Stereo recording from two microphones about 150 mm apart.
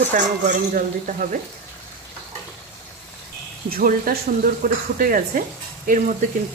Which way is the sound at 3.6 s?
75° right (ahead or behind).